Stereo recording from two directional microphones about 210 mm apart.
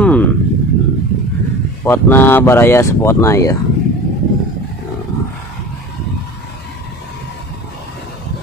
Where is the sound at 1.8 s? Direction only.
10° left (ahead or behind).